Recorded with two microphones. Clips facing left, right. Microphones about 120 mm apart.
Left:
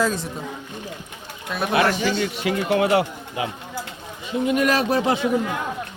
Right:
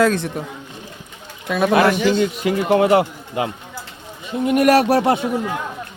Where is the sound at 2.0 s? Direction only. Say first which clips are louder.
Right 5 dB; 45° right (ahead or behind).